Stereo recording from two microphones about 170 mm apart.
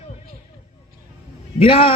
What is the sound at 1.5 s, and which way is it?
Speech, 35° left (ahead or behind).